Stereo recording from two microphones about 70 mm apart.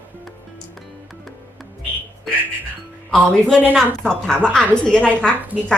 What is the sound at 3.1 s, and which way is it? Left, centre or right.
A woman's voice, centre.